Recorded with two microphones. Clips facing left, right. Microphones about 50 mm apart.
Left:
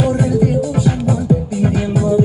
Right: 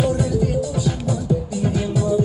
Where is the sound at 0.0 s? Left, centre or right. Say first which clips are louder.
Left 5 dB; left.